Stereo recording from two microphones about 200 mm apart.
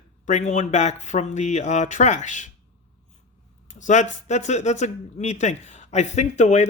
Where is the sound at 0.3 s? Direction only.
35° left (ahead or behind).